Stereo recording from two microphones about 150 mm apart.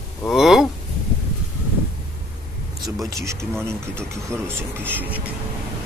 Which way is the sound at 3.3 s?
20° right (ahead or behind).